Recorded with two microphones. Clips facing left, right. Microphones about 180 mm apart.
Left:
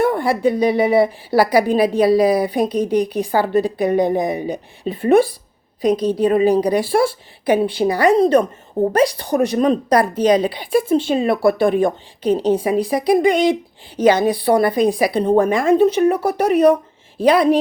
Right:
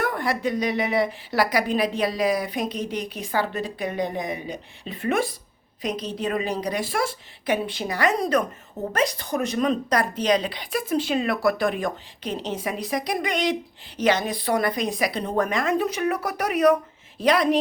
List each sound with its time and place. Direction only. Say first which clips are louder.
0.0 s a woman's voice: left 9 dB; 30° left (ahead or behind)